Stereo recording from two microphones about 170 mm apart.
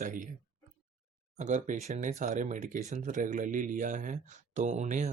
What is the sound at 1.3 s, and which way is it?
Speech, 45° right (ahead or behind).